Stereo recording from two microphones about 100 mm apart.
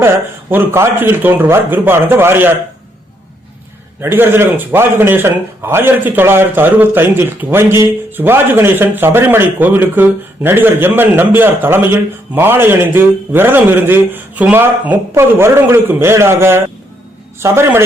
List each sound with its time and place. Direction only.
0.5 s a man's voice: 25° right (ahead or behind)
4.0 s a man's voice: 25° right (ahead or behind)